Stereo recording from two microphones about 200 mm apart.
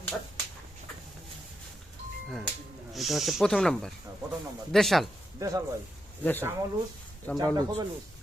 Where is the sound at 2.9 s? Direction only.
Centre (ahead or behind).